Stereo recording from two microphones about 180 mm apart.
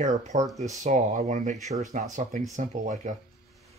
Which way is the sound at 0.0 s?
40° right (ahead or behind).